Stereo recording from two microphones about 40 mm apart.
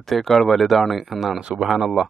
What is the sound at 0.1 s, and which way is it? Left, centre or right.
Speech, centre.